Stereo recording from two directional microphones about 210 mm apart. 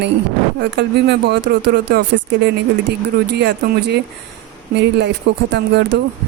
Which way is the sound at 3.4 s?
50° right (ahead or behind).